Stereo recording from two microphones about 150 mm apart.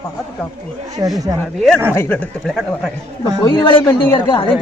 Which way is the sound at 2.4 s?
Centre (ahead or behind).